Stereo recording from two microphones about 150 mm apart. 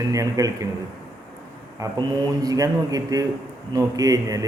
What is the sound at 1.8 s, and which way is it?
A man's voice, 20° right (ahead or behind).